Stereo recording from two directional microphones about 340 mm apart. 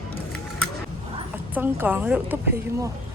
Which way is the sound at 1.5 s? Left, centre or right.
Centre.